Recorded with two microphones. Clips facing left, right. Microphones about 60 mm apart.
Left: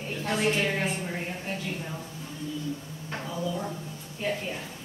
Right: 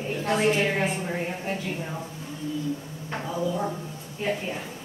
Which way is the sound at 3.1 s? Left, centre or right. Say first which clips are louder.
Right 4 dB; centre.